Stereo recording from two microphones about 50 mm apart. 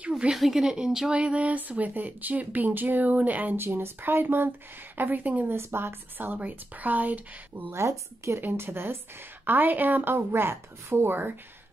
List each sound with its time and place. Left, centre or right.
0.3 s speech: centre
1.1 s speech: right
3.5 s a woman's voice: right
4.9 s speech: right
5.5 s speech: right
7.7 s speech: right
8.4 s a woman's voice: right
9.4 s speech: right
10.1 s a woman's voice: right